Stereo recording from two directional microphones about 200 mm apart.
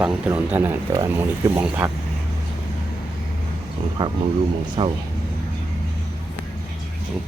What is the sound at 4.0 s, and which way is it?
Speech, 25° right (ahead or behind).